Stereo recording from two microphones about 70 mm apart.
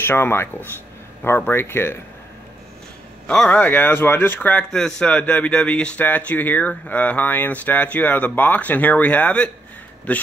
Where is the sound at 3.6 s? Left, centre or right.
Left.